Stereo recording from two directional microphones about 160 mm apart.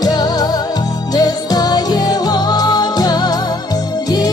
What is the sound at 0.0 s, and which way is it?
Music, 25° left (ahead or behind).